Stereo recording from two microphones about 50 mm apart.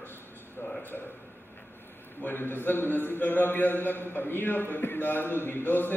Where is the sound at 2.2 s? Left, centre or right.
Left.